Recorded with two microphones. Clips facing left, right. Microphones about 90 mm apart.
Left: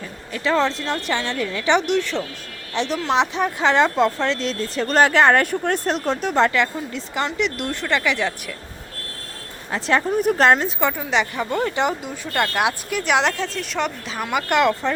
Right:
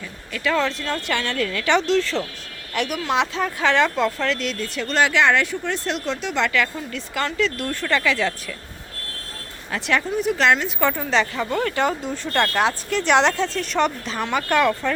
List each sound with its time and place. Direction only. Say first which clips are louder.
0.3 s speech: left 2 dB; 30° left (ahead or behind)
6.5 s speech: left 1 dB; 25° left (ahead or behind)
9.7 s speech: left 3 dB; 35° left (ahead or behind)
10.2 s a woman's voice: left 3 dB; 45° left (ahead or behind)
10.8 s speech: right 1 dB; 15° left (ahead or behind)
12.0 s speech: right 1 dB; 10° left (ahead or behind)